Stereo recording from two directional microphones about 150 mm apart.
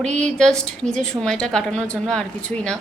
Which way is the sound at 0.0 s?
5° left (ahead or behind).